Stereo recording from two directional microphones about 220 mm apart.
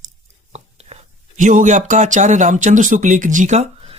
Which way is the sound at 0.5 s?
30° right (ahead or behind).